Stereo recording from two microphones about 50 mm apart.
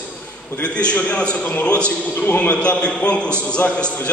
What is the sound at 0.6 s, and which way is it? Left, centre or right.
A man's voice, left.